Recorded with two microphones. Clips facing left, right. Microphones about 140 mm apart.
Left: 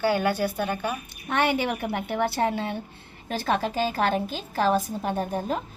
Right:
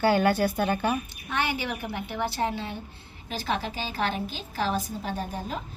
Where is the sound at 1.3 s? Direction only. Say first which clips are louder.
Left 5 dB; 60° left (ahead or behind).